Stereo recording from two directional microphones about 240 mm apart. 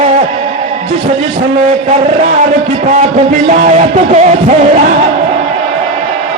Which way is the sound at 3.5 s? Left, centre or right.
Right.